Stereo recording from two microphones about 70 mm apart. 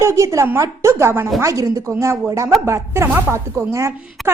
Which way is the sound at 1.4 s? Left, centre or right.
Right.